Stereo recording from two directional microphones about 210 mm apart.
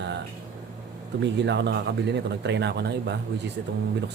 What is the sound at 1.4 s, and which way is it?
Speech, 55° right (ahead or behind).